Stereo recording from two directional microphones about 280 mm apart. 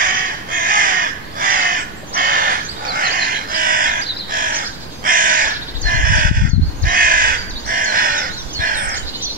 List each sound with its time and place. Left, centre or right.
0.0 s crow: right